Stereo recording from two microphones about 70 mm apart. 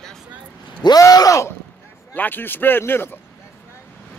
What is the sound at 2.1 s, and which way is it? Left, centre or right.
Speech, left.